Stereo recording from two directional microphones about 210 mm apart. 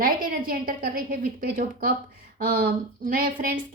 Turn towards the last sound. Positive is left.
turn(degrees=-40)  # may be behind; listen again after turning